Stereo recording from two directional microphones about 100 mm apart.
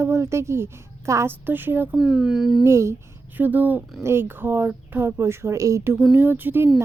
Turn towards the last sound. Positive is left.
turn(degrees=-20)  # may be behind; listen again after turning